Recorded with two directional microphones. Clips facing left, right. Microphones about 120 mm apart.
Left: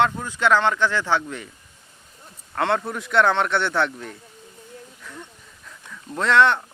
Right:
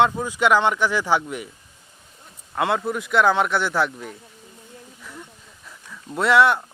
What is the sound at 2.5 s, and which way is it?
A man's voice, 5° right (ahead or behind).